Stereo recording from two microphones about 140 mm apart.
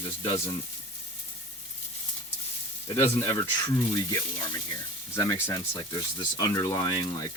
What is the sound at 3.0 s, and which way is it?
Speech, 20° left (ahead or behind).